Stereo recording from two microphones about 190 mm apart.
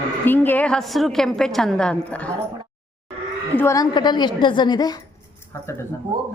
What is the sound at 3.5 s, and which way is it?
A woman's voice, 15° left (ahead or behind).